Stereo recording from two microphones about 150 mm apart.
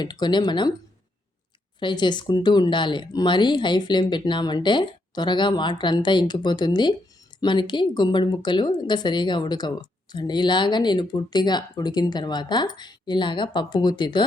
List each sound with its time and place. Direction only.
0.0 s speech: 30° left (ahead or behind)
1.8 s speech: 30° left (ahead or behind)